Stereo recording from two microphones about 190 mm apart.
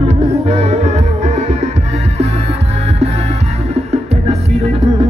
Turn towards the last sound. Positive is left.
turn(degrees=-35)  # may be behind; listen again after turning